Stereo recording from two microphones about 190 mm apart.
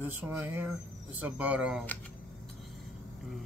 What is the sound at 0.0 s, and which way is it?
Speech, 10° right (ahead or behind).